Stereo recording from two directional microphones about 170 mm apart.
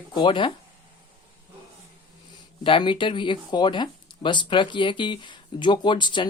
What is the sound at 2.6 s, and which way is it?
Speech, 30° left (ahead or behind).